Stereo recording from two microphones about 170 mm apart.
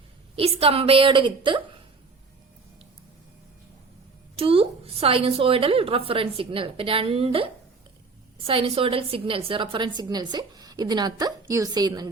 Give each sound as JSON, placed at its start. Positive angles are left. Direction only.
{"t": 0.3, "sound": "a woman's voice", "side_deg": -35}
{"t": 4.4, "sound": "a woman's voice", "side_deg": -35}